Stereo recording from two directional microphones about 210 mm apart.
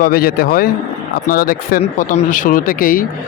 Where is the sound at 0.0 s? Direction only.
45° left (ahead or behind).